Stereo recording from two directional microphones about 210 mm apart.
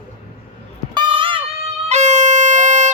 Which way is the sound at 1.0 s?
25° right (ahead or behind).